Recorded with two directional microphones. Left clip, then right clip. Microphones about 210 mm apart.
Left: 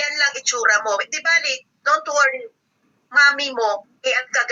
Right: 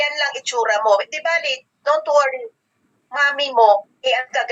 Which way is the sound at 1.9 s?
15° left (ahead or behind).